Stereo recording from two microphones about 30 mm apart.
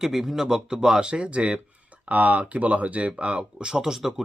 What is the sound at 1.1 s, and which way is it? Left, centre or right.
Speech, right.